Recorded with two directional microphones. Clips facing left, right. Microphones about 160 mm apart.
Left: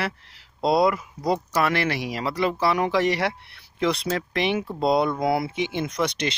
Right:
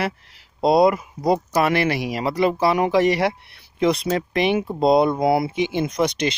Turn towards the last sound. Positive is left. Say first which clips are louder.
# right 4 dB
turn(degrees=-15)  # may be behind; listen again after turning